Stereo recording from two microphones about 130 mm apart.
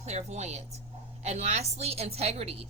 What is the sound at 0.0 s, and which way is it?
A woman's voice, 60° right (ahead or behind).